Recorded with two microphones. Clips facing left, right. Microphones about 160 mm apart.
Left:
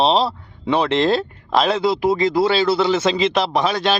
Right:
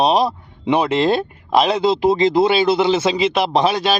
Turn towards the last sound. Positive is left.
turn(degrees=-20)  # may be behind; listen again after turning